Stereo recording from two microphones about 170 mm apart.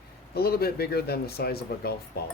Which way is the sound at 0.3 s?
65° left (ahead or behind).